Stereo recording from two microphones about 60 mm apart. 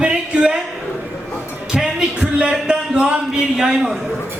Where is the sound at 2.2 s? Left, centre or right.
Centre.